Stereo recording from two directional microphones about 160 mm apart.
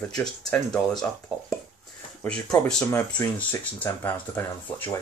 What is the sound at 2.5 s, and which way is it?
Speech, 5° left (ahead or behind).